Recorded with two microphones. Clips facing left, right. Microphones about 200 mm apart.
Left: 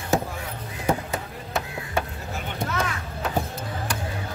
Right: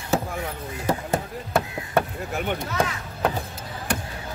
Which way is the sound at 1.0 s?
55° right (ahead or behind).